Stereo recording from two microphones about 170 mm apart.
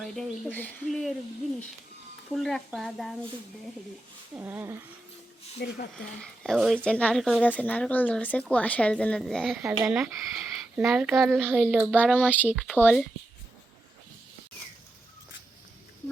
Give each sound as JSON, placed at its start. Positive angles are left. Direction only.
{"t": 0.0, "sound": "speech", "side_deg": 0}
{"t": 2.3, "sound": "speech", "side_deg": 0}
{"t": 4.4, "sound": "speech", "side_deg": -10}
{"t": 5.6, "sound": "speech", "side_deg": 70}
{"t": 6.4, "sound": "speech", "side_deg": 0}
{"t": 11.5, "sound": "speech", "side_deg": -5}
{"t": 12.1, "sound": "speech", "side_deg": 10}
{"t": 12.5, "sound": "speech", "side_deg": -5}